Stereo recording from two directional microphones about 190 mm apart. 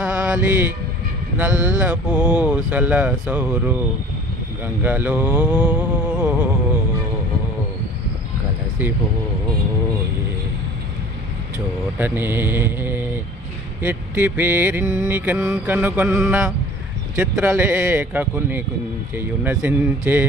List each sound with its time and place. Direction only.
0.0 s mantra: 5° right (ahead or behind)
4.6 s speech: 10° right (ahead or behind)
8.8 s mantra: 10° right (ahead or behind)
11.5 s mantra: 10° right (ahead or behind)